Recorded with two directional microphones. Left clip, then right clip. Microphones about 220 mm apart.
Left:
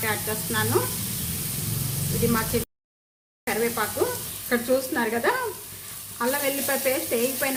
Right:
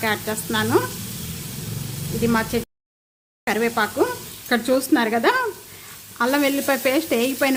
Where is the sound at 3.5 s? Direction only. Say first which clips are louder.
Right 5 dB; 50° right (ahead or behind).